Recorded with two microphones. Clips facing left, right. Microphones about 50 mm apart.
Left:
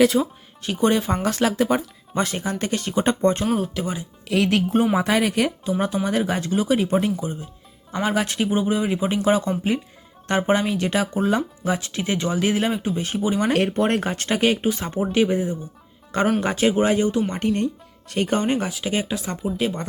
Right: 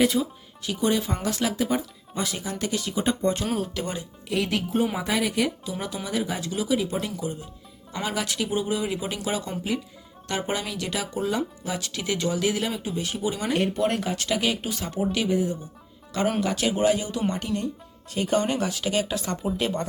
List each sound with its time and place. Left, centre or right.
0.0 s speech: left
0.6 s speech: left
3.5 s speech: centre
4.3 s speech: left
5.8 s speech: left
6.1 s speech: left
6.4 s speech: left
6.9 s speech: left
13.4 s speech: left
14.6 s speech: left
18.3 s speech: left
18.7 s speech: centre